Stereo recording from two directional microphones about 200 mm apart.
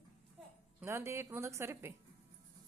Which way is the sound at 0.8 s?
15° right (ahead or behind).